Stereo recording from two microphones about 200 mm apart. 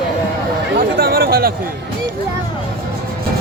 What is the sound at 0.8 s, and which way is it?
Speech, 50° right (ahead or behind).